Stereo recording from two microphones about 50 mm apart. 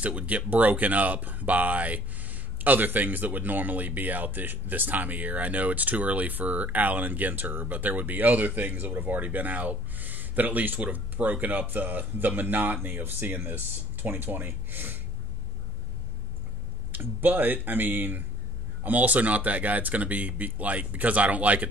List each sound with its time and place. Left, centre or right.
0.0 s speech: right
16.9 s speech: right